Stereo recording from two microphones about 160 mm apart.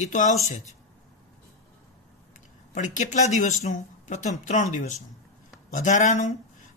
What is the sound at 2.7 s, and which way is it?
Speech, 50° left (ahead or behind).